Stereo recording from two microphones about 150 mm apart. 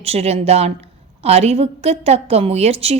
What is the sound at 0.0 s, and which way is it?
A woman's voice, 45° right (ahead or behind).